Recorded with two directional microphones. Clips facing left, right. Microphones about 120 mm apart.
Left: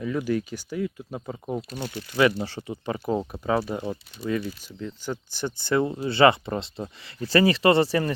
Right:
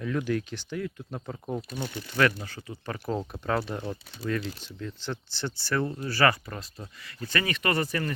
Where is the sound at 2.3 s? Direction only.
30° left (ahead or behind).